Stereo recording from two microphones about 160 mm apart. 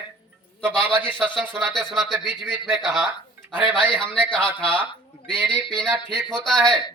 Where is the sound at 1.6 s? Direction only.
10° right (ahead or behind).